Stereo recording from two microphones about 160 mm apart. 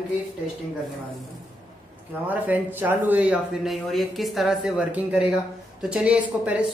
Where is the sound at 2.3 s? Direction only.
10° right (ahead or behind).